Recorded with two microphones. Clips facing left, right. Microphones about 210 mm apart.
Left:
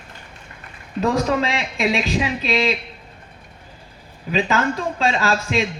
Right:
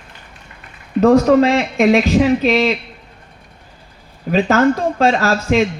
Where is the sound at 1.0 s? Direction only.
45° right (ahead or behind).